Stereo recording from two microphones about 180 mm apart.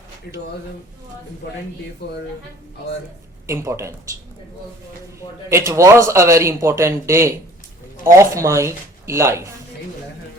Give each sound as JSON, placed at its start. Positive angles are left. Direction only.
{"t": 0.3, "sound": "speech", "side_deg": 55}
{"t": 3.4, "sound": "a man's voice", "side_deg": -15}
{"t": 5.5, "sound": "a man's voice", "side_deg": -15}